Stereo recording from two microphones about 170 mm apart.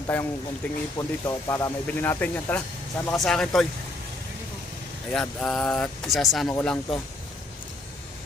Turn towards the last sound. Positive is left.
turn(degrees=5)  # may be behind; listen again after turning